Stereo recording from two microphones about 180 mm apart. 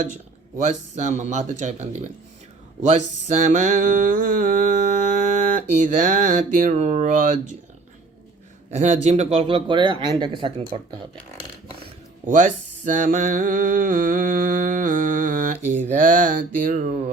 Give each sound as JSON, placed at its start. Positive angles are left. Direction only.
{"t": 0.5, "sound": "mantra", "side_deg": -45}
{"t": 8.7, "sound": "speech", "side_deg": -40}
{"t": 12.2, "sound": "mantra", "side_deg": -45}